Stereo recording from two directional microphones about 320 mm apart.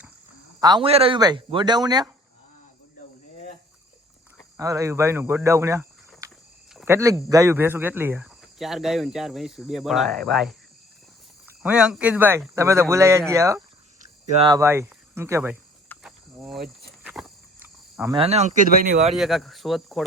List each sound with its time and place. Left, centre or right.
0.6 s speech: centre
4.5 s speech: centre
14.0 s speech: right
15.9 s cricket: centre; by 19.1 s right
19.1 s speech: centre